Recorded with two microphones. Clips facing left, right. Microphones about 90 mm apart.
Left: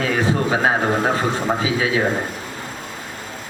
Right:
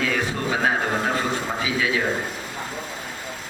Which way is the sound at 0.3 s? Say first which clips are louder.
Left 5 dB; 35° left (ahead or behind).